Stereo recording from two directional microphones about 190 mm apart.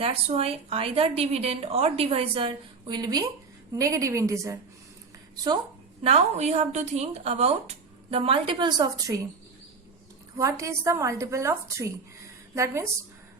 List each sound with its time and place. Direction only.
0.0 s a woman's voice: 30° right (ahead or behind)
6.0 s a woman's voice: 35° right (ahead or behind); by 9.2 s 20° right (ahead or behind)
10.3 s a woman's voice: 15° right (ahead or behind)